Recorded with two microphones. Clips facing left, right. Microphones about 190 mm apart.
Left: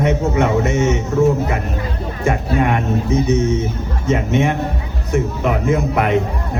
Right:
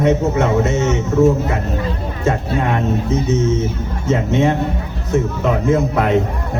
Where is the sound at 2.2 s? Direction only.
15° left (ahead or behind).